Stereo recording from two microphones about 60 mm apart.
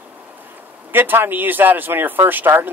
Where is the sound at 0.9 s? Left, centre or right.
Right.